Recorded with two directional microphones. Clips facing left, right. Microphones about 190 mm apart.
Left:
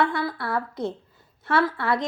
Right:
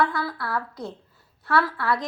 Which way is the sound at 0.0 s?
20° left (ahead or behind).